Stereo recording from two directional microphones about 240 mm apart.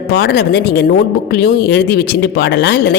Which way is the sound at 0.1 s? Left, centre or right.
Left.